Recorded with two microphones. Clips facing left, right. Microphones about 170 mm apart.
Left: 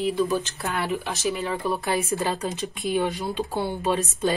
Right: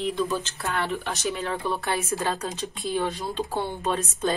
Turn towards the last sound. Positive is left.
turn(degrees=10)  # may be behind; listen again after turning